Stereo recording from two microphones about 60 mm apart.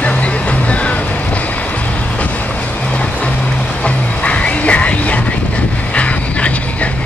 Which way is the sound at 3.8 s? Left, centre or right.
Left.